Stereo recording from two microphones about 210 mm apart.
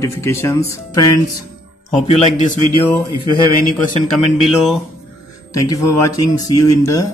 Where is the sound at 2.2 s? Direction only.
35° left (ahead or behind).